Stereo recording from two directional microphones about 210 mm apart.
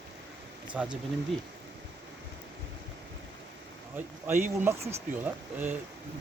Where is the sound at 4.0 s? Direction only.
10° right (ahead or behind).